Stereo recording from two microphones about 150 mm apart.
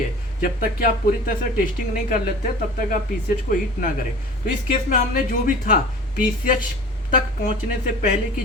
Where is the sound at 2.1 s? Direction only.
70° left (ahead or behind).